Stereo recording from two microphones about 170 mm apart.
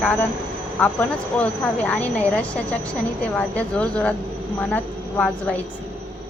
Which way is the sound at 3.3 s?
10° left (ahead or behind).